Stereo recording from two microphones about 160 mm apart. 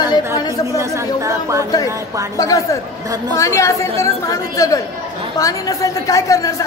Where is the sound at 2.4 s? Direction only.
20° left (ahead or behind).